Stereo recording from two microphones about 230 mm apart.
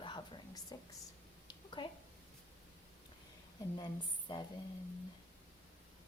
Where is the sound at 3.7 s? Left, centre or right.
Centre.